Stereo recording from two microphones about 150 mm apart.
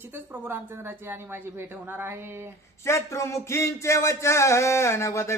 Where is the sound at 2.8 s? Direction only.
20° left (ahead or behind).